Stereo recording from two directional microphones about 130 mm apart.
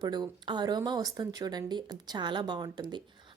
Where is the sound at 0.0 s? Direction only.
35° right (ahead or behind).